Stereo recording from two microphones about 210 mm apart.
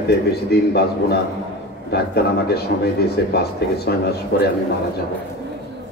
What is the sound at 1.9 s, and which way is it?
A man's voice, 50° left (ahead or behind).